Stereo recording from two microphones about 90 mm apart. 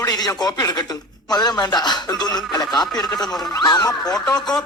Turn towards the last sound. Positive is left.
turn(degrees=5)  # may be behind; listen again after turning